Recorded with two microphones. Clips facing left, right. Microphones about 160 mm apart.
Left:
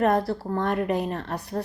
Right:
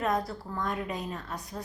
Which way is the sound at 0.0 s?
65° left (ahead or behind).